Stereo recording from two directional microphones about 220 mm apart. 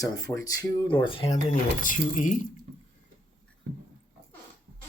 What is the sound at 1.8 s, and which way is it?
Speech, 35° left (ahead or behind).